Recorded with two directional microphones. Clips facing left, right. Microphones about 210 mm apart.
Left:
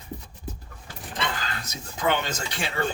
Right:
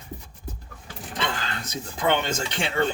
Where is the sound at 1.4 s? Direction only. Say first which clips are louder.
Right 3 dB; 30° right (ahead or behind).